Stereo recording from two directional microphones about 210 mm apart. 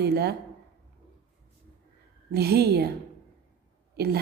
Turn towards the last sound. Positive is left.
turn(degrees=-50)  # may be behind; listen again after turning